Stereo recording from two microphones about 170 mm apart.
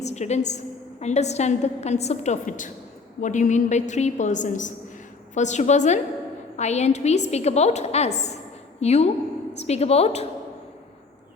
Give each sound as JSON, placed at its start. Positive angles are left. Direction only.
{"t": 0.0, "sound": "a woman's voice", "side_deg": 40}